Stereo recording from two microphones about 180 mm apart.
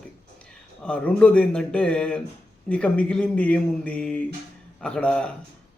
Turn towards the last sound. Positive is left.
turn(degrees=5)  # may be behind; listen again after turning